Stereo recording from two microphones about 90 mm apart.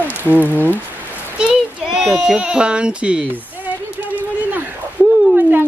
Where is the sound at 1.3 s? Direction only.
5° right (ahead or behind).